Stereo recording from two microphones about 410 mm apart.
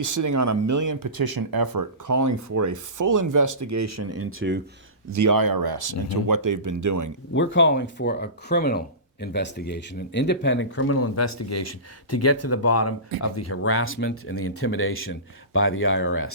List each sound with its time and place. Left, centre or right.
0.0 s speech: right
5.1 s speech: right
7.3 s speech: left